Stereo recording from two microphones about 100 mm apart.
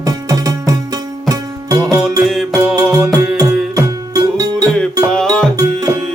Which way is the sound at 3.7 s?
35° right (ahead or behind).